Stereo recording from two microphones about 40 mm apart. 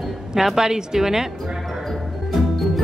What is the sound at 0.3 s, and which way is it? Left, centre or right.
Speech, centre.